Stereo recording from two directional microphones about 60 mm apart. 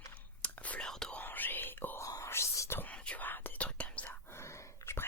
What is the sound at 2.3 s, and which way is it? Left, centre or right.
Whispering, left.